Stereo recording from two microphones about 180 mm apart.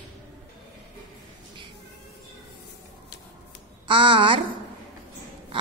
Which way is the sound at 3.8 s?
30° right (ahead or behind).